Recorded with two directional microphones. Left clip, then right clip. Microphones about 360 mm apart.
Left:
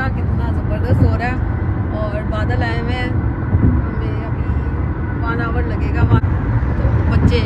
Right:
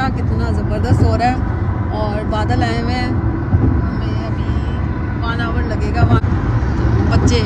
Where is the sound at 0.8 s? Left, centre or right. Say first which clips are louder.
Right 5 dB; centre.